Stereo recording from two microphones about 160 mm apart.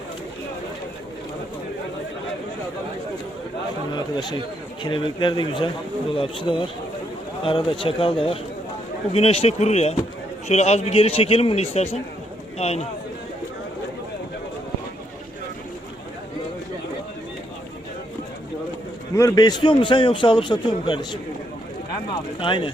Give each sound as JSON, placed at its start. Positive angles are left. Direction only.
{"t": 3.9, "sound": "a man's voice", "side_deg": 25}
{"t": 19.1, "sound": "a man's voice", "side_deg": 20}
{"t": 22.4, "sound": "a man's voice", "side_deg": 30}